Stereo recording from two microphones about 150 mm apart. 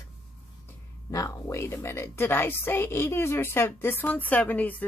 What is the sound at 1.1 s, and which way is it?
A woman's voice, 20° left (ahead or behind).